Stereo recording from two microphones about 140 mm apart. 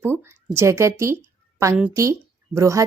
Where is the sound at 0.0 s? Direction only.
20° right (ahead or behind).